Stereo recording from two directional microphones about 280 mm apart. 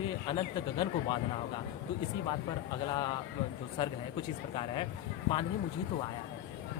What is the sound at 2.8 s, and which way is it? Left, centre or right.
Speech, centre.